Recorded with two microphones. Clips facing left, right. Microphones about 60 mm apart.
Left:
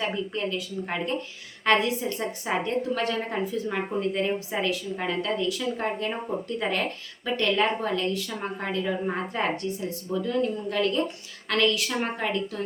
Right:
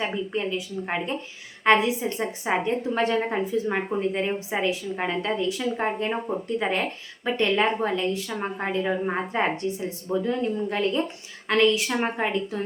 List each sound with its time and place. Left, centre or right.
0.0 s a woman's voice: centre